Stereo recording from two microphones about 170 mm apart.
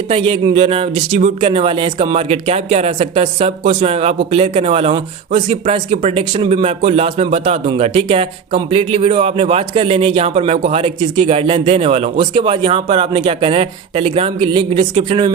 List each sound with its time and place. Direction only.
0.1 s speech: 30° right (ahead or behind)